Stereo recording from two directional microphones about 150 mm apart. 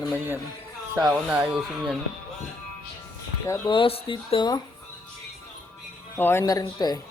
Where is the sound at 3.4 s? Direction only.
20° left (ahead or behind).